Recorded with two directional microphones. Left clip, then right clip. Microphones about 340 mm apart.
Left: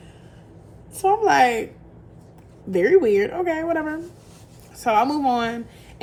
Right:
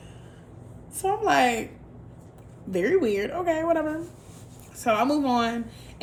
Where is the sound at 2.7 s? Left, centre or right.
Centre.